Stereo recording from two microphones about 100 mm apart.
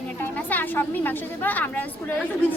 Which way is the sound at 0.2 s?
20° left (ahead or behind).